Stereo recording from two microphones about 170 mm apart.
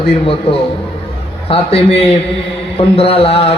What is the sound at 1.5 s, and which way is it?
A man's voice, 35° left (ahead or behind).